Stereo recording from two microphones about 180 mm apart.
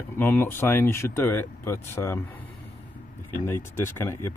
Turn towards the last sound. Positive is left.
turn(degrees=15)  # may be behind; listen again after turning